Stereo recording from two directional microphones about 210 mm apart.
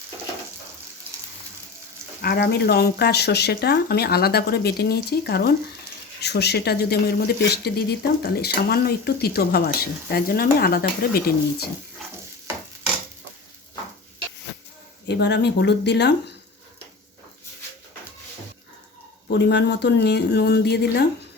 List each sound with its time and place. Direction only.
2.2 s speech: 50° left (ahead or behind)
15.0 s speech: 55° left (ahead or behind)
19.3 s speech: 55° left (ahead or behind)